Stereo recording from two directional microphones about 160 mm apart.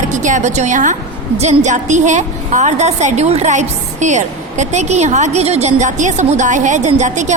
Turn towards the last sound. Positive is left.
turn(degrees=-50)  # may be behind; listen again after turning